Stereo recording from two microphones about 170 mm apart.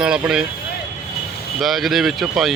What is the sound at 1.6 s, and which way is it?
Speech, centre (ahead or behind).